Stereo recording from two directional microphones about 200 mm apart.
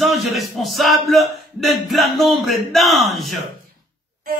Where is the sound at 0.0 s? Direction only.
Centre (ahead or behind).